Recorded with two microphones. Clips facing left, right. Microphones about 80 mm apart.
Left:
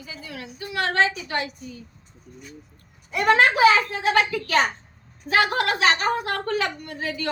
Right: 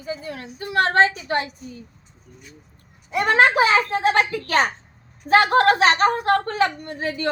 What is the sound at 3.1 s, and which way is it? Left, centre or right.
A woman's voice, right.